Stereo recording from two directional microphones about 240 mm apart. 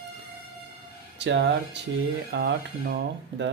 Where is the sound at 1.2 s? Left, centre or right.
Right.